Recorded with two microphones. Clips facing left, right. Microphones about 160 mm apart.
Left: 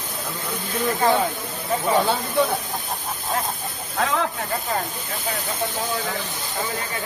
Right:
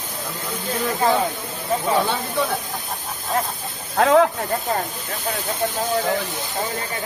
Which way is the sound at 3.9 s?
65° right (ahead or behind).